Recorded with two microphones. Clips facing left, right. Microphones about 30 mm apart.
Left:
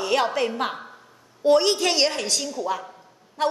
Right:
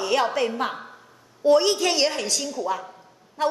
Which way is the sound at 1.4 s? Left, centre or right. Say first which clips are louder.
Even; left.